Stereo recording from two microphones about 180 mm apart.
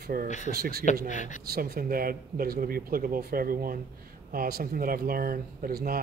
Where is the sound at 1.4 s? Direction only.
55° right (ahead or behind).